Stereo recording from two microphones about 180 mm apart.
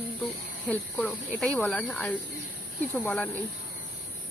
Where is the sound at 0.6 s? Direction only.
5° left (ahead or behind).